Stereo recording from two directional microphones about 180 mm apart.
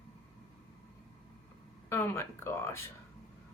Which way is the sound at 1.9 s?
15° left (ahead or behind).